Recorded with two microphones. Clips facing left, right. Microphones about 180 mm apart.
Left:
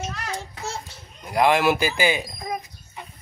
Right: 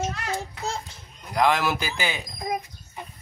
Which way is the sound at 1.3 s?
10° left (ahead or behind).